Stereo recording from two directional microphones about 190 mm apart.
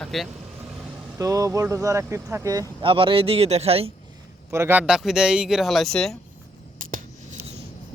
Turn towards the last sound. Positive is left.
turn(degrees=-45)  # may be behind; listen again after turning